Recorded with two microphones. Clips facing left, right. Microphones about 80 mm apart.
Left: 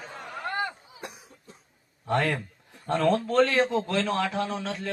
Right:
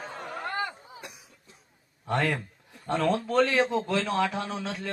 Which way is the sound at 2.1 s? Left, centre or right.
Centre.